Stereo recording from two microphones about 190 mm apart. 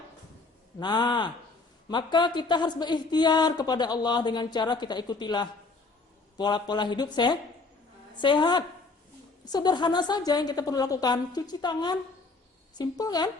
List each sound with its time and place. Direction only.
0.8 s speech: 20° left (ahead or behind)